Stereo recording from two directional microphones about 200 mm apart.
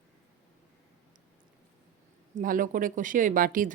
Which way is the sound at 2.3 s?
45° right (ahead or behind).